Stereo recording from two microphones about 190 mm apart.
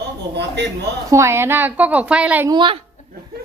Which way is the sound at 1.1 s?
15° right (ahead or behind).